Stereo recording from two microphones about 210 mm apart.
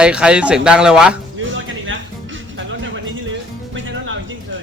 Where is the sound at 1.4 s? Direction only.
65° right (ahead or behind).